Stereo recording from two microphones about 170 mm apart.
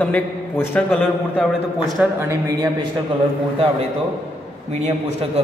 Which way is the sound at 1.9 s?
15° right (ahead or behind).